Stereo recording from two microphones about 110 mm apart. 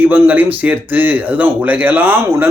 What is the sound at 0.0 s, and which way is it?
Speech, 15° right (ahead or behind).